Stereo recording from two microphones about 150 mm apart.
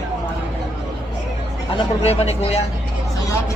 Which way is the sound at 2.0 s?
45° left (ahead or behind).